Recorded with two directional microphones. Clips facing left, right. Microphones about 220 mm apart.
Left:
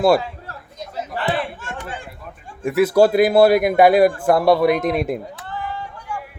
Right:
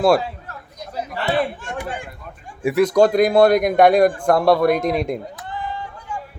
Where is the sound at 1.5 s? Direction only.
15° right (ahead or behind).